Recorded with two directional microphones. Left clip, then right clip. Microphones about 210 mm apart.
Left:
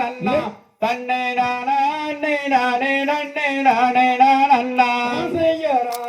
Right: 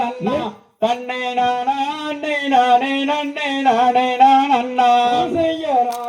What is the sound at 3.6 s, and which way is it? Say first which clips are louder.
Music: right 1 dB; 10° right (ahead or behind).